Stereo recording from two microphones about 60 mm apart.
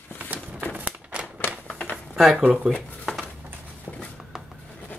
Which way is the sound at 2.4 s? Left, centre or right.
Right.